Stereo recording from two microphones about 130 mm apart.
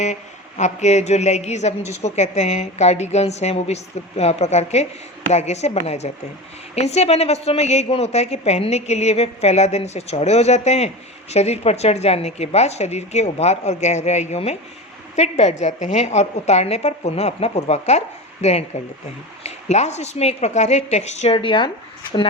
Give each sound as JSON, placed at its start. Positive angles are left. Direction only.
{"t": 0.0, "sound": "a woman's voice", "side_deg": 65}
{"t": 21.3, "sound": "speech", "side_deg": 40}